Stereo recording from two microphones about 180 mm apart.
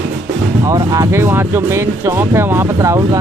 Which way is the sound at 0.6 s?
20° right (ahead or behind).